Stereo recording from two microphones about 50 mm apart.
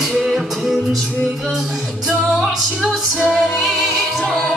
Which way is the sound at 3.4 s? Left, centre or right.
Centre.